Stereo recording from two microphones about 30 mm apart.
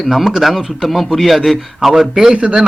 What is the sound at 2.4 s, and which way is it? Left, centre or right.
Speech, right.